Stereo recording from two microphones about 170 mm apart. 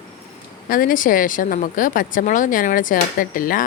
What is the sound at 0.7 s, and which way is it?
Speech, 55° left (ahead or behind).